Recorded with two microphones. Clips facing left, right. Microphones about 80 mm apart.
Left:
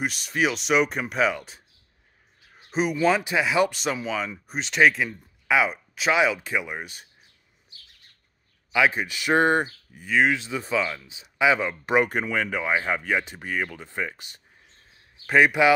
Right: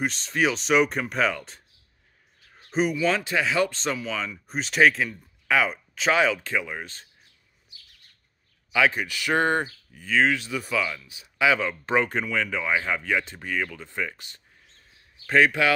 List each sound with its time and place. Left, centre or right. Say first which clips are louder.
0.0 s speech: even; centre
2.4 s a sound: left 1 dB; centre
2.7 s speech: right 1 dB; centre
3.1 s speech: left 2 dB; centre
4.5 s speech: even; centre
8.7 s speech: left 1 dB; centre